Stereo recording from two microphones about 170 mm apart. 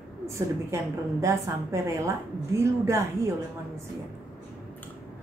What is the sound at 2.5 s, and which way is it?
Speech, 15° right (ahead or behind).